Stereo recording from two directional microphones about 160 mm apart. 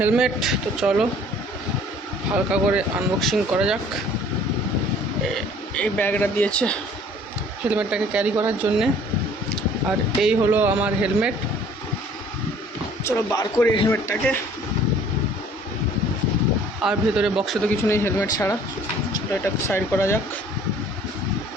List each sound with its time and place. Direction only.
0.0 s speech: 5° right (ahead or behind)
2.3 s speech: 5° right (ahead or behind)
5.3 s speech: 5° left (ahead or behind)
7.7 s speech: 5° right (ahead or behind)
10.2 s speech: 5° right (ahead or behind)
13.1 s speech: 20° left (ahead or behind)
16.8 s speech: 5° right (ahead or behind)
17.8 s speech: 15° left (ahead or behind)